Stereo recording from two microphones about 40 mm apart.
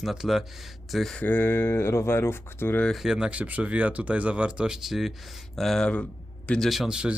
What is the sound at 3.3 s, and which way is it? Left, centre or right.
Speech, right.